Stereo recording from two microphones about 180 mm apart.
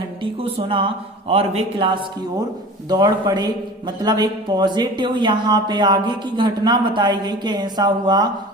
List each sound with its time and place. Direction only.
0.2 s a man's voice: 30° right (ahead or behind)